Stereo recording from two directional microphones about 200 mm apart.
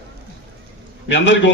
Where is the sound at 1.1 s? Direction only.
65° left (ahead or behind).